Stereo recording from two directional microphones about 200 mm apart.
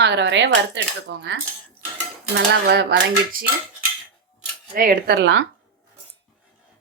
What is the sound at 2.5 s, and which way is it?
Cutlery, 55° right (ahead or behind).